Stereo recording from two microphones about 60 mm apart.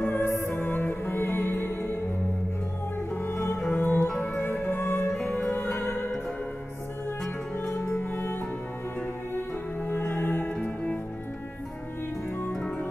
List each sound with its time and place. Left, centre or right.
0.0 s music: left
3.2 s music: left
7.5 s music: left
12.5 s music: centre